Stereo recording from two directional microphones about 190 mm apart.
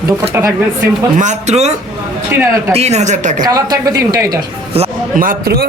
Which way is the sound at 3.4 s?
20° right (ahead or behind).